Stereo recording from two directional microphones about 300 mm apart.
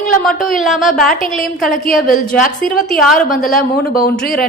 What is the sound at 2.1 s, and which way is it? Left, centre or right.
A woman's voice, left.